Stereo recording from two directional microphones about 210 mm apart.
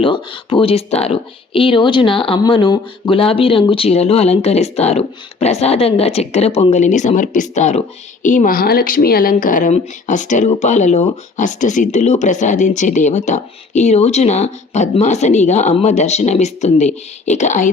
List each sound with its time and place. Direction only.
0.0 s speech: 25° left (ahead or behind)